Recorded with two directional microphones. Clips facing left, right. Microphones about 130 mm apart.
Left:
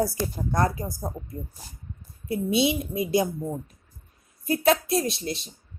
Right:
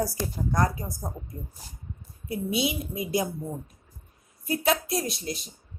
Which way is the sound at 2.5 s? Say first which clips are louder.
Left 5 dB; 25° left (ahead or behind).